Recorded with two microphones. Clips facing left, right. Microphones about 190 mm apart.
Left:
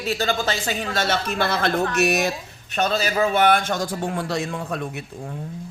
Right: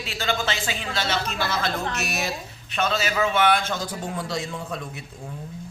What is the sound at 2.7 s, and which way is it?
A man's voice, 40° left (ahead or behind).